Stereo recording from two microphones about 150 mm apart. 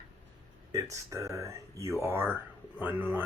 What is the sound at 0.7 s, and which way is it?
Speech, 20° right (ahead or behind).